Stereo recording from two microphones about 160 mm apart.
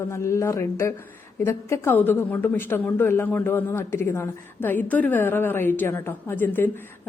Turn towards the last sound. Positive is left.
turn(degrees=10)  # may be behind; listen again after turning